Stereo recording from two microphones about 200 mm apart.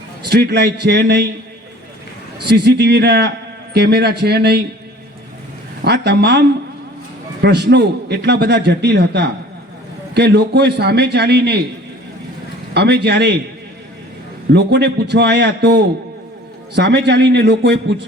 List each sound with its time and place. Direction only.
0.3 s a man's voice: 55° right (ahead or behind)
2.5 s a man's voice: 55° right (ahead or behind)
5.8 s a man's voice: 55° right (ahead or behind)
7.4 s a man's voice: 55° right (ahead or behind)
12.7 s a man's voice: 55° right (ahead or behind)
14.5 s a man's voice: 55° right (ahead or behind)